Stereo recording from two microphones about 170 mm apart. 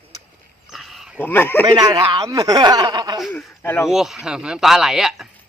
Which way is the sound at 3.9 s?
Centre (ahead or behind).